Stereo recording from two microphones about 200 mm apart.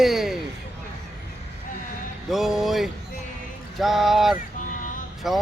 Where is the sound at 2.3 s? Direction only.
Centre (ahead or behind).